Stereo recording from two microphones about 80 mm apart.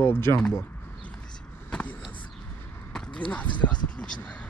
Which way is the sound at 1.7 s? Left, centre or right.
Centre.